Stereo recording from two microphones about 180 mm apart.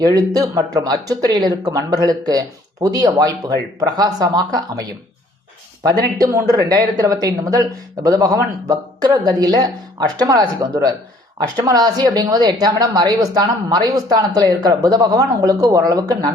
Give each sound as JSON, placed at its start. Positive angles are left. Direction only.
{"t": 0.0, "sound": "a woman's voice", "side_deg": -20}